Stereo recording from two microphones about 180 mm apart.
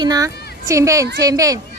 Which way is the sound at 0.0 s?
20° right (ahead or behind).